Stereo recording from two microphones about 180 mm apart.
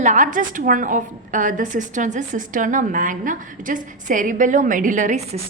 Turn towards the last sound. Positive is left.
turn(degrees=-40)  # may be behind; listen again after turning